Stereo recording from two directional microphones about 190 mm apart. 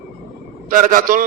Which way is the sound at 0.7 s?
45° right (ahead or behind).